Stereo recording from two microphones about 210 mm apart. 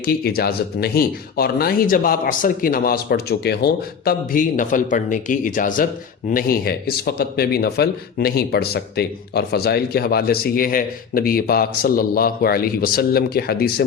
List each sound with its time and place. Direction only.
0.0 s speech: 45° left (ahead or behind)